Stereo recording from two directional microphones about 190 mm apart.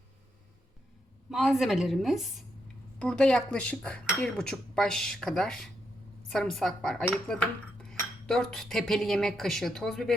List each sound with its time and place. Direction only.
1.3 s speech: centre (ahead or behind)